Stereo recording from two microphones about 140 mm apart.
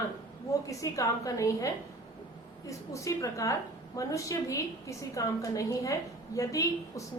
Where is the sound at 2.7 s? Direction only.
25° left (ahead or behind).